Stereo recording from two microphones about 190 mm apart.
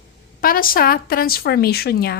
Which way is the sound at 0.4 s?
50° left (ahead or behind).